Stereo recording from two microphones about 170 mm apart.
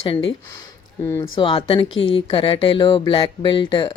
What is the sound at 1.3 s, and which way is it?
Speech, 30° left (ahead or behind).